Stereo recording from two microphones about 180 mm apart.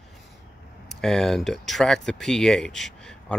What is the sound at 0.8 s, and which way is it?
Speech, 5° left (ahead or behind).